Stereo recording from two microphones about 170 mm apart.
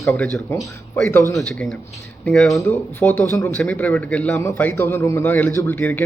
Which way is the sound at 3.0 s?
15° left (ahead or behind).